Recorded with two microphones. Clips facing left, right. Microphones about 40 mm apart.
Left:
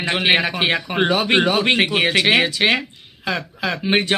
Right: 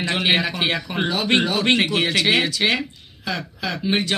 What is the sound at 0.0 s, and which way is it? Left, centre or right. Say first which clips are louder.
Speech: left 2 dB; left.